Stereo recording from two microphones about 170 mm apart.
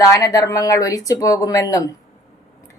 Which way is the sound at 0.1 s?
20° left (ahead or behind).